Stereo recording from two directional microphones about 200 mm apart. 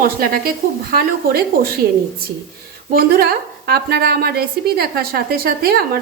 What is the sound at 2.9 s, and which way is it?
Speech, 50° right (ahead or behind).